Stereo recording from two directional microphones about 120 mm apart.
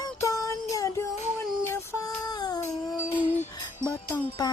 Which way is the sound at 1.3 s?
20° left (ahead or behind).